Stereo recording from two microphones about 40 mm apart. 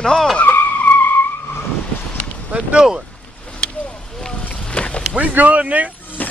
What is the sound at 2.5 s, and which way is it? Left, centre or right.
Speech, right.